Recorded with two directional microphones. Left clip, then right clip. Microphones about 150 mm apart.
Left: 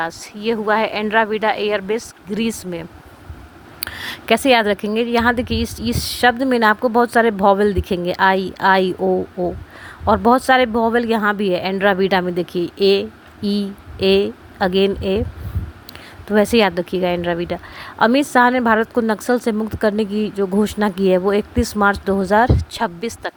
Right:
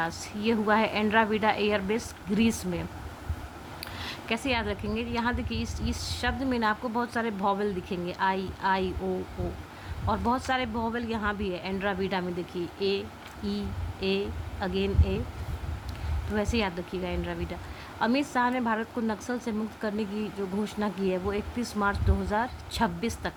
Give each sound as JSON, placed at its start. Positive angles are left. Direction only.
{"t": 0.0, "sound": "a woman's voice", "side_deg": 60}
{"t": 3.8, "sound": "a sound", "side_deg": 60}
{"t": 4.9, "sound": "a woman's voice", "side_deg": 60}
{"t": 10.1, "sound": "a woman's voice", "side_deg": 55}
{"t": 16.3, "sound": "a woman's voice", "side_deg": 60}